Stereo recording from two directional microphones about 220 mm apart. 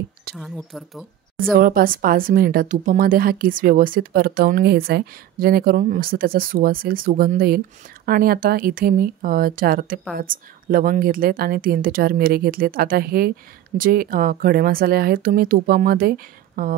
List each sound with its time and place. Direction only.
0.4 s speech: centre (ahead or behind)
1.4 s speech: 40° right (ahead or behind)